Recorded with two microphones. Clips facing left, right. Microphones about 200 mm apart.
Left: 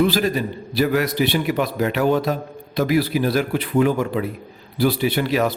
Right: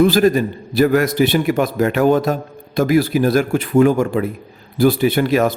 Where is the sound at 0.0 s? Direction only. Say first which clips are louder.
Right 6 dB; 50° right (ahead or behind).